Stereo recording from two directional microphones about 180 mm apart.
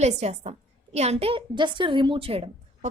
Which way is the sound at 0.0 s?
40° right (ahead or behind).